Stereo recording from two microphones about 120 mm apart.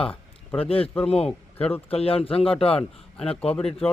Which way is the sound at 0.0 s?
50° left (ahead or behind).